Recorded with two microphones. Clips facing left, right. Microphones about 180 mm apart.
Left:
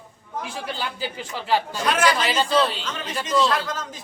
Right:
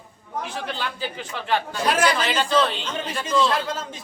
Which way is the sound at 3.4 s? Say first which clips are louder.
Even; 25° right (ahead or behind).